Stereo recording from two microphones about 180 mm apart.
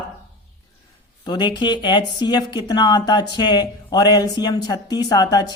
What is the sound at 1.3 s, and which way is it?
Speech, 25° left (ahead or behind).